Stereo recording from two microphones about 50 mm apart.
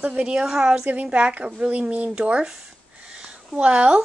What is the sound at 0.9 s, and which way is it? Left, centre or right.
A woman's voice, right.